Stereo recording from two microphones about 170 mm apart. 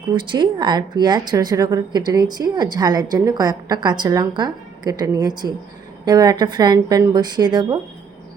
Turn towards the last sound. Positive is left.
turn(degrees=-25)  # may be behind; listen again after turning